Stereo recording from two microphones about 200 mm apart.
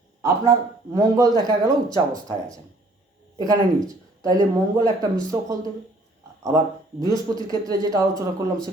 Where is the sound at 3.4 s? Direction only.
15° right (ahead or behind).